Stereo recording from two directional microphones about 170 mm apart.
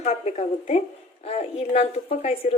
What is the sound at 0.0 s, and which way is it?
A woman's voice, 40° left (ahead or behind).